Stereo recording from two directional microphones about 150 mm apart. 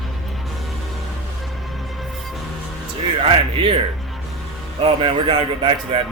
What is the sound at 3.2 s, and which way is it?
Speech, 35° right (ahead or behind).